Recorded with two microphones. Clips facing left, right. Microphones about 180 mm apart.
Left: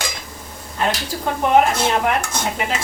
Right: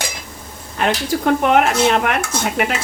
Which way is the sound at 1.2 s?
70° right (ahead or behind).